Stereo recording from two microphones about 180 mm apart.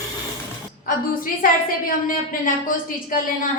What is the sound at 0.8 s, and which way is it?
A woman's voice, 50° left (ahead or behind).